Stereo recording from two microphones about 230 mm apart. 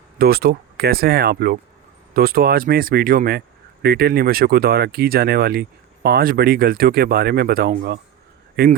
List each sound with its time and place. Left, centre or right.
0.2 s speech: right